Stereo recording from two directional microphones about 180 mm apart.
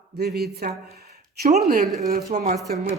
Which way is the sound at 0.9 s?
60° right (ahead or behind).